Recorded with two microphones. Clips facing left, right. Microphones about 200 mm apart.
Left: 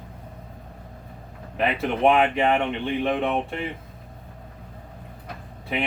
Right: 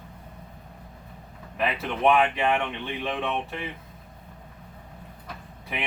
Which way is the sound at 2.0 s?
30° left (ahead or behind).